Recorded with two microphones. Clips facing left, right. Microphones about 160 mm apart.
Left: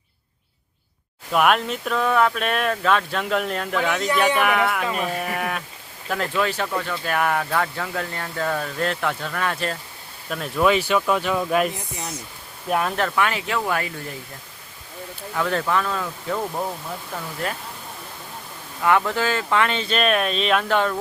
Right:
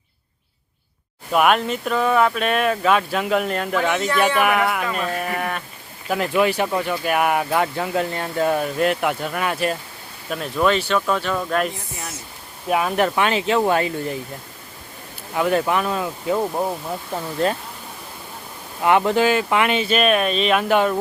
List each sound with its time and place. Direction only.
1.3 s speech: centre (ahead or behind)
6.1 s speech: 10° right (ahead or behind)
10.2 s speech: centre (ahead or behind)
13.0 s speech: 20° right (ahead or behind)
15.4 s speech: 15° right (ahead or behind)
18.8 s speech: 20° right (ahead or behind)